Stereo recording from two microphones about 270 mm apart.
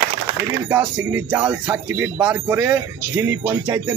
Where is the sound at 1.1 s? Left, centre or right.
Centre.